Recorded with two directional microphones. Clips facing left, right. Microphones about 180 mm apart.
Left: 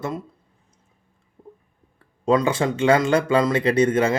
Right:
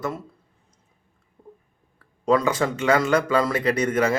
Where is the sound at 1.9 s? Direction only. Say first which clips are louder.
Left 1 dB; 25° left (ahead or behind).